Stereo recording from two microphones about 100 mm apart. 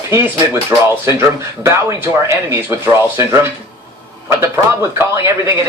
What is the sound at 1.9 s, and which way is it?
Speech, 25° right (ahead or behind).